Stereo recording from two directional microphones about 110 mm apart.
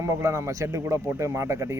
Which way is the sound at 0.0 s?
25° right (ahead or behind).